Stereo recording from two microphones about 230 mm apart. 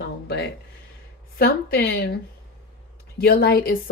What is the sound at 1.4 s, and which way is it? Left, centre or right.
Speech, left.